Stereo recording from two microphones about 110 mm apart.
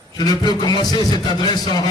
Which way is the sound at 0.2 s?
40° left (ahead or behind).